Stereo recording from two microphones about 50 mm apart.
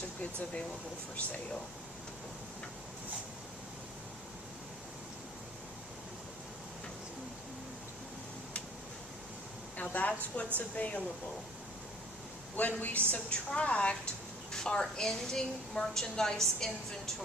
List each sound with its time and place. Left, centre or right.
0.2 s a woman's voice: left
9.7 s a woman's voice: left
12.5 s a woman's voice: left; by 17.2 s centre